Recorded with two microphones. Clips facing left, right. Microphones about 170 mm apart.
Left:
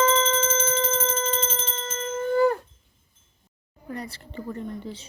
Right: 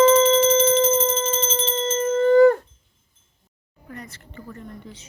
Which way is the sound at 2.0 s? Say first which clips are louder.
Right 8 dB; 60° right (ahead or behind).